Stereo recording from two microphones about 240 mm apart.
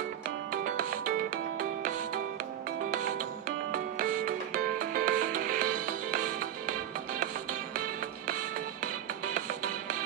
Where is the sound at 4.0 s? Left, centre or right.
Right.